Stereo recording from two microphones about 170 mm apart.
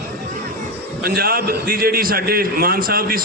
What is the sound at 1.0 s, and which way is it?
A man's voice, 60° right (ahead or behind).